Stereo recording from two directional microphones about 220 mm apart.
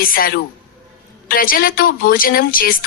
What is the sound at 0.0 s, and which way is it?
Speech, 40° left (ahead or behind).